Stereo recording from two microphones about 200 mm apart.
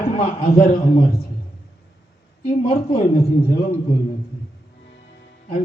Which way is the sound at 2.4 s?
30° left (ahead or behind).